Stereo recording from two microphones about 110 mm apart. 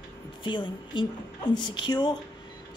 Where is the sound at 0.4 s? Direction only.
45° left (ahead or behind).